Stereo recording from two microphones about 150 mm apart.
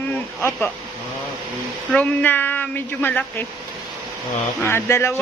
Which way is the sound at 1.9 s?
10° left (ahead or behind).